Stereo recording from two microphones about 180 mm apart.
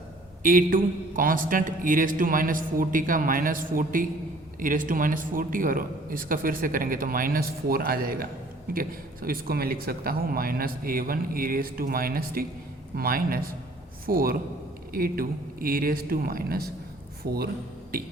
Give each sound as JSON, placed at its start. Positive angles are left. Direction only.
{"t": 0.4, "sound": "speech", "side_deg": -50}